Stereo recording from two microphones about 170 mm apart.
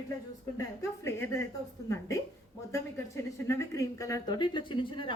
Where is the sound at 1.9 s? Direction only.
20° left (ahead or behind).